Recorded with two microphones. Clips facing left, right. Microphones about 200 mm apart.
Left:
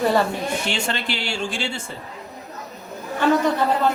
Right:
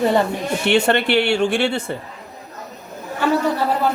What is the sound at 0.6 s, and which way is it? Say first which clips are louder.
Speech: right 9 dB; 60° right (ahead or behind).